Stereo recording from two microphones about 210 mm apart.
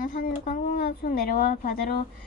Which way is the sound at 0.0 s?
40° left (ahead or behind).